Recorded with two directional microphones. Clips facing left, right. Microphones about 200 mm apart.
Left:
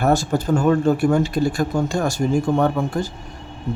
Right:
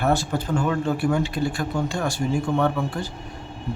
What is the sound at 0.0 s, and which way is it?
Speech, 45° left (ahead or behind).